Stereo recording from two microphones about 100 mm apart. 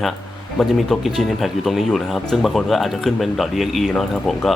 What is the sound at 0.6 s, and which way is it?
Speech, centre (ahead or behind).